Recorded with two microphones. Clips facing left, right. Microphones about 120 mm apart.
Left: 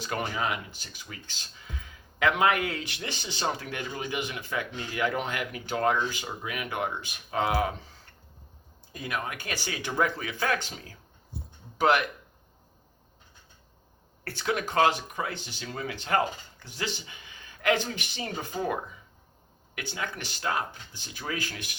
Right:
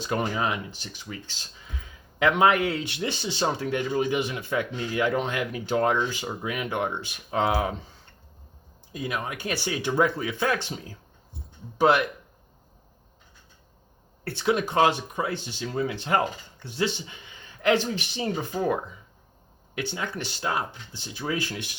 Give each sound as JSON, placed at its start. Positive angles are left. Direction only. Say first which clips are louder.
{"t": 0.0, "sound": "speech", "louder": "right 4 dB", "side_deg": -25}
{"t": 2.1, "sound": "speech", "louder": "right 4 dB", "side_deg": -25}
{"t": 8.9, "sound": "speech", "louder": "right 3 dB", "side_deg": -20}
{"t": 14.3, "sound": "speech", "louder": "right 5 dB", "side_deg": -20}
{"t": 19.7, "sound": "speech", "louder": "right 4 dB", "side_deg": -25}